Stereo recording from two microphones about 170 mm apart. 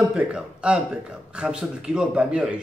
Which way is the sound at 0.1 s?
5° right (ahead or behind).